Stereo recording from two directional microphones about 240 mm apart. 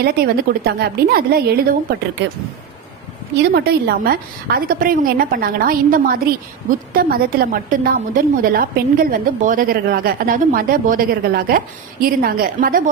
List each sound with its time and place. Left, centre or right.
0.0 s a woman's voice: right
3.5 s a woman's voice: right